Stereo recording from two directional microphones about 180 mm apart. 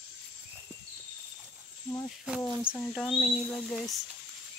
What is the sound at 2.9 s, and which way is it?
Cricket, centre (ahead or behind).